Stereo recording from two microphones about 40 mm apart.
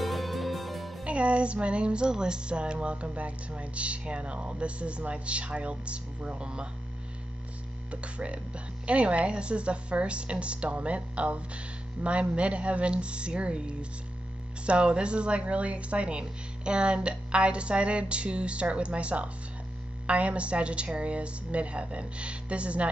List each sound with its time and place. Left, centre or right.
0.0 s music: centre
1.0 s a woman's voice: right
7.9 s a woman's voice: right